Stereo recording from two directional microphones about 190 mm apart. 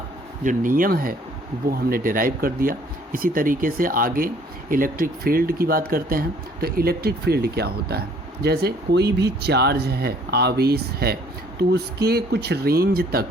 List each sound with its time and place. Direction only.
0.4 s speech: 45° right (ahead or behind)